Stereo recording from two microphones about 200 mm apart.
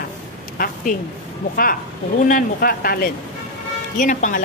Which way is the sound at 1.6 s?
45° left (ahead or behind).